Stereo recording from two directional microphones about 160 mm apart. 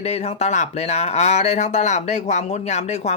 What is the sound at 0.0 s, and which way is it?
Speech, 40° left (ahead or behind).